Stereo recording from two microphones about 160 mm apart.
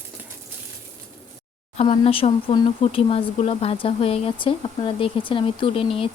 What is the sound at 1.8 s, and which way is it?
Speech, 35° left (ahead or behind).